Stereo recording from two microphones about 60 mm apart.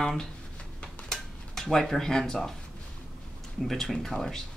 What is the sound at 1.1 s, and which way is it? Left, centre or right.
Dishes, centre.